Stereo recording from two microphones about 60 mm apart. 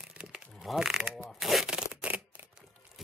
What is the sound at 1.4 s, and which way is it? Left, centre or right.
Shuffling cards, centre.